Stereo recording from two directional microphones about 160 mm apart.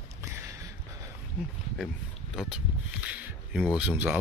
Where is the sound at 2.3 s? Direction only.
5° right (ahead or behind).